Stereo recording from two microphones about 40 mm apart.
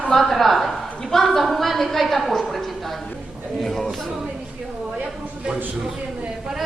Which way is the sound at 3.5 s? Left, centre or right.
Centre.